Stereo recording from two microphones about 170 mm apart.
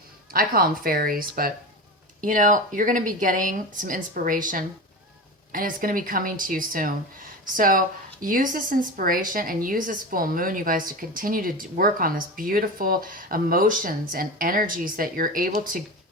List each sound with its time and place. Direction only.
0.3 s speech: 60° right (ahead or behind)